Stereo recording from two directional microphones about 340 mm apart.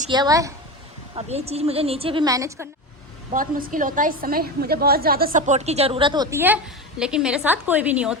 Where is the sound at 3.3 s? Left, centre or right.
Right.